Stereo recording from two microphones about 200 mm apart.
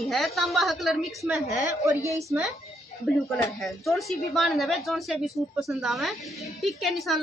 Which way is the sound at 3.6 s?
Centre (ahead or behind).